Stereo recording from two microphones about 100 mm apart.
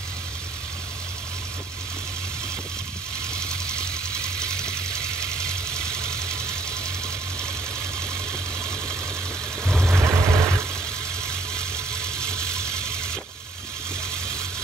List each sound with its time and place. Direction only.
3.3 s engine: 10° left (ahead or behind)
4.4 s vehicle: 10° left (ahead or behind)
9.8 s vehicle: 25° right (ahead or behind)
11.5 s engine: 10° left (ahead or behind)